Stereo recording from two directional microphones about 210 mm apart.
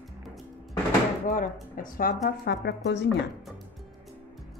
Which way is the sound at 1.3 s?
40° left (ahead or behind).